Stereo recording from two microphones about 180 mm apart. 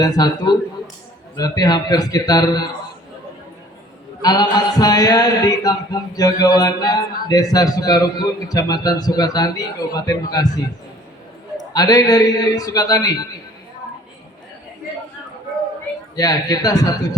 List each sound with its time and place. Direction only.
0.0 s a man's voice: 20° left (ahead or behind)
4.2 s a man's voice: 20° left (ahead or behind)
11.7 s a man's voice: 20° left (ahead or behind)
16.1 s a man's voice: 20° left (ahead or behind)